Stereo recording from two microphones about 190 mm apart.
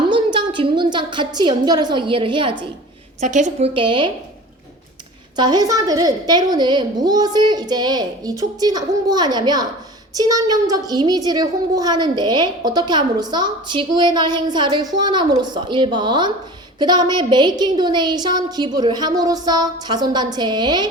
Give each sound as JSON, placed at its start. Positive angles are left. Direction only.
{"t": 0.1, "sound": "a woman's voice", "side_deg": -25}
{"t": 3.2, "sound": "a woman's voice", "side_deg": -40}
{"t": 3.8, "sound": "a child's voice", "side_deg": -25}
{"t": 5.4, "sound": "a child's voice", "side_deg": -20}